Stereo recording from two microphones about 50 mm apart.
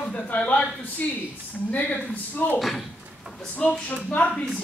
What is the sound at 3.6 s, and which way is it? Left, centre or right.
Speech, left.